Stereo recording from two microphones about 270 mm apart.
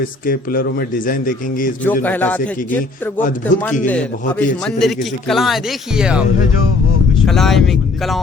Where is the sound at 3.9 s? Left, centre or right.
Centre.